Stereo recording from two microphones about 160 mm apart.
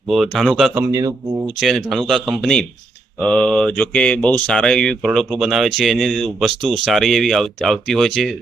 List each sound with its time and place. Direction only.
0.1 s speech: centre (ahead or behind)
0.9 s speech: 20° right (ahead or behind)
1.5 s speech: centre (ahead or behind)